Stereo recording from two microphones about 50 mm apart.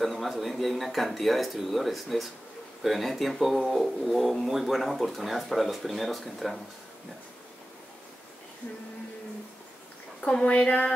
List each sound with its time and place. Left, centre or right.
0.0 s speech: centre
10.4 s speech: left